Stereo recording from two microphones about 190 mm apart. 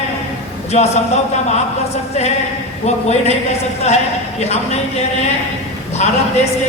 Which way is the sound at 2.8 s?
35° left (ahead or behind).